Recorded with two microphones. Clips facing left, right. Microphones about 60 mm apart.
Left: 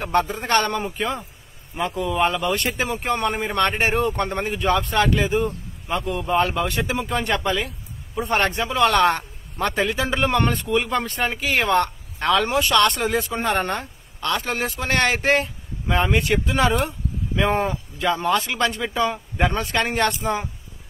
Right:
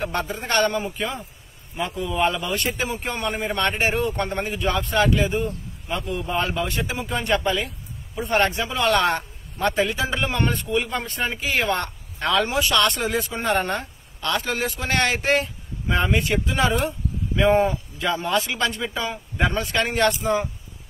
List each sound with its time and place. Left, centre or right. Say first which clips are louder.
0.0 s a man's voice: left 5 dB; left
6.1 s a man's voice: left 4 dB; left